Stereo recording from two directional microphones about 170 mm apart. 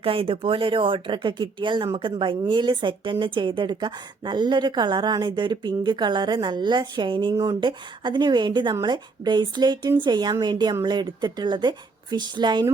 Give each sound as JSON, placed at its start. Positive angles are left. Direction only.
{"t": 0.0, "sound": "speech", "side_deg": -30}